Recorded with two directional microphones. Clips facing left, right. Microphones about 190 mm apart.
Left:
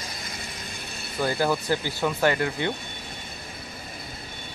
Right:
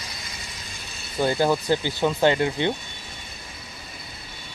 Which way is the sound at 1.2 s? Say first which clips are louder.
Right 3 dB; 25° right (ahead or behind).